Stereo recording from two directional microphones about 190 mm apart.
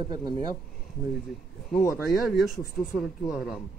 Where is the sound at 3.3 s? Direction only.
5° right (ahead or behind).